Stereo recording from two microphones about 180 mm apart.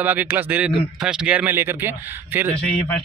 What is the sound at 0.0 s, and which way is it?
Speech, 10° right (ahead or behind).